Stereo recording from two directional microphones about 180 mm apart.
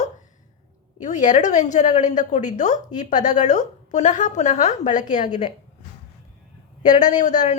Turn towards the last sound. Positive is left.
turn(degrees=45)  # may be behind; listen again after turning